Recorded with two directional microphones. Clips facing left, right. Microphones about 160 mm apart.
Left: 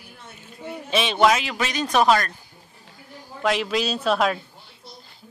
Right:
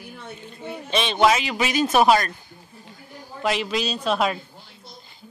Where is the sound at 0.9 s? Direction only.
5° left (ahead or behind).